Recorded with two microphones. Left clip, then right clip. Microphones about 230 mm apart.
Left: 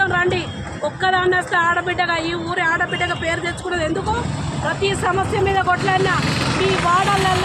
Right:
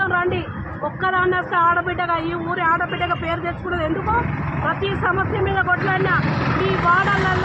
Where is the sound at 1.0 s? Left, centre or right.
Left.